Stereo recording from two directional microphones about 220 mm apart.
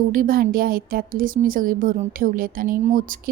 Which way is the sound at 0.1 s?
40° right (ahead or behind).